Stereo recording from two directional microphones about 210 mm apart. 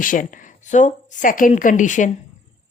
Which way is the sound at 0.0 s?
40° left (ahead or behind).